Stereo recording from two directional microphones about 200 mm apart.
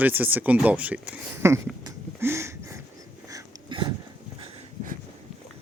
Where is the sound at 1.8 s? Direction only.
15° right (ahead or behind).